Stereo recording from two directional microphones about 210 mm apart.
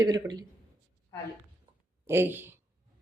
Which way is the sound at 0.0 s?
20° right (ahead or behind).